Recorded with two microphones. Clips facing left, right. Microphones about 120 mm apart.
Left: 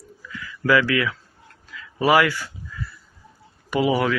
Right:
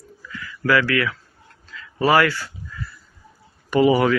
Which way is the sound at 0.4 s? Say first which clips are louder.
Even; 20° left (ahead or behind).